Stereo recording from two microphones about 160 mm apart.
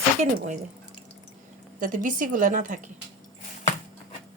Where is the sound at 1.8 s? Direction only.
55° right (ahead or behind).